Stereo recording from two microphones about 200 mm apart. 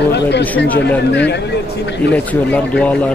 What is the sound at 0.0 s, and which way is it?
Speech, 60° left (ahead or behind).